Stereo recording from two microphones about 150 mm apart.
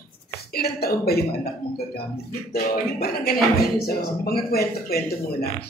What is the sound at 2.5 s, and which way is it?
A man's voice, 90° left.